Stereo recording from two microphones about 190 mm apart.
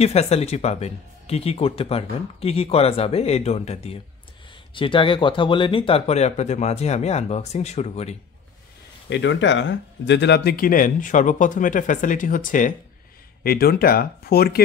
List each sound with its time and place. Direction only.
0.0 s speech: 35° left (ahead or behind)
9.1 s speech: 70° left (ahead or behind); by 14.6 s 55° left (ahead or behind)